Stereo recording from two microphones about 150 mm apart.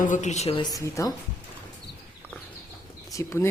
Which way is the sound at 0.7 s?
25° left (ahead or behind).